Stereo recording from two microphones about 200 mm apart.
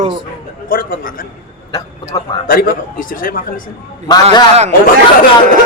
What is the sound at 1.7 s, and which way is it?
Speech, 15° left (ahead or behind).